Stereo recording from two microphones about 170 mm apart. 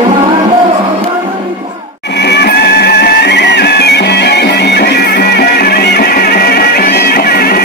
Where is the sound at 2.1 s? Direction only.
80° left.